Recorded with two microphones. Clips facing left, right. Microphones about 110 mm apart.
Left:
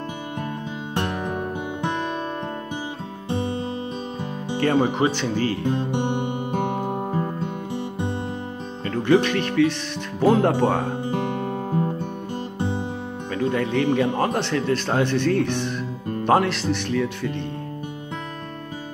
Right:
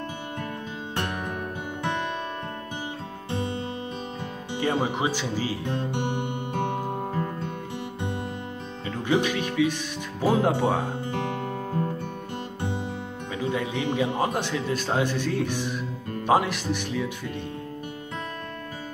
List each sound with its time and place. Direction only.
0.9 s music: 25° left (ahead or behind)
3.3 s music: 20° left (ahead or behind)
4.6 s speech: 10° right (ahead or behind)
5.6 s music: 20° left (ahead or behind)
8.8 s speech: 10° right (ahead or behind)
11.1 s music: 15° left (ahead or behind)
13.3 s speech: 10° right (ahead or behind)